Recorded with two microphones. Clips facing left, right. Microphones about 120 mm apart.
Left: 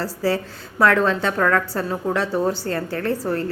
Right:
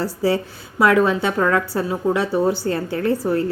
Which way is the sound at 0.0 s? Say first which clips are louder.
Right 2 dB; 15° right (ahead or behind).